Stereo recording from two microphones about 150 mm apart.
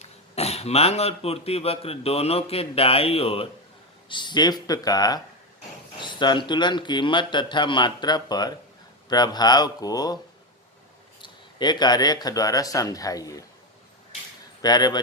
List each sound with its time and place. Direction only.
0.0 s speech: 45° left (ahead or behind); by 10.2 s 25° left (ahead or behind)
11.2 s speech: 30° left (ahead or behind)
14.6 s speech: 25° left (ahead or behind)